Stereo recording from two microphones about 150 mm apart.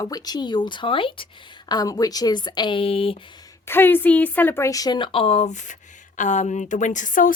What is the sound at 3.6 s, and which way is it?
A woman's voice, 15° left (ahead or behind).